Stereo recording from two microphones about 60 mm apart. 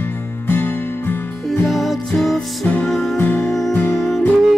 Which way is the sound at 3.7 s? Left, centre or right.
Left.